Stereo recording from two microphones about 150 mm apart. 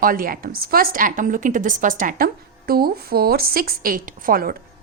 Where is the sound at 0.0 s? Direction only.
70° right (ahead or behind).